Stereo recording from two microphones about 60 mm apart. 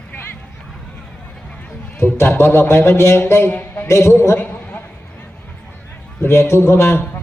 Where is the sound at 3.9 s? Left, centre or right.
Left.